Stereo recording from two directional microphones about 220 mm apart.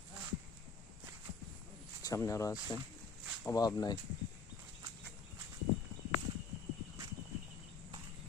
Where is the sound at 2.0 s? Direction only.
15° left (ahead or behind).